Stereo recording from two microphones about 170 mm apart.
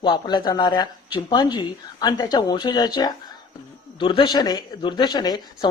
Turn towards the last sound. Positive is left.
turn(degrees=25)  # may be behind; listen again after turning